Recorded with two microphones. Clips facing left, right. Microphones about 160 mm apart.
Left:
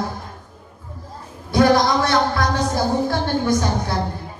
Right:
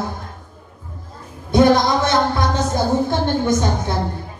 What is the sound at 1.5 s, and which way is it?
Music, 20° right (ahead or behind).